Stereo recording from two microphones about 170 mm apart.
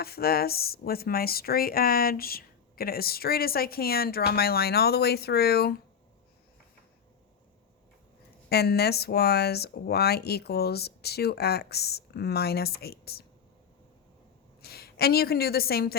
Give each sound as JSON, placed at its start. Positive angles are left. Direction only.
{"t": 0.0, "sound": "speech", "side_deg": 65}
{"t": 8.4, "sound": "speech", "side_deg": 70}
{"t": 14.6, "sound": "a woman's voice", "side_deg": 65}